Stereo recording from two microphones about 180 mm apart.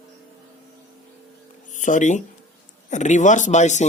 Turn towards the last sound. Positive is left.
turn(degrees=40)  # may be behind; listen again after turning